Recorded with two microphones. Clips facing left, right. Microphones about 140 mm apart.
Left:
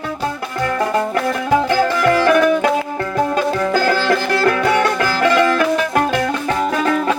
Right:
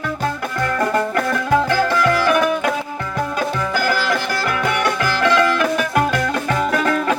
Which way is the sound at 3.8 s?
35° left (ahead or behind).